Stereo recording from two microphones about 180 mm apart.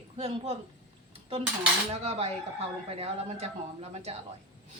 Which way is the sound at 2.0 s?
35° right (ahead or behind).